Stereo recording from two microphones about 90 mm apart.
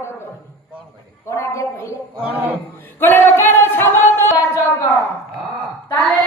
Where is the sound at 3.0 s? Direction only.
25° left (ahead or behind).